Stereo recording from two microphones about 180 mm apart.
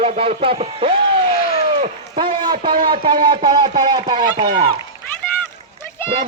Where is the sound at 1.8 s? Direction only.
30° right (ahead or behind).